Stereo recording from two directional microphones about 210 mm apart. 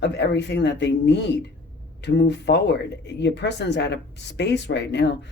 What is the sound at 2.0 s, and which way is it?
Speech, 55° left (ahead or behind).